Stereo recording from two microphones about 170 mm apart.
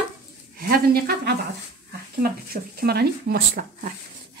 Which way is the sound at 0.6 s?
65° right (ahead or behind).